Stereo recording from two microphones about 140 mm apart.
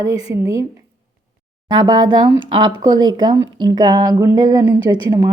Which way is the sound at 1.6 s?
30° right (ahead or behind).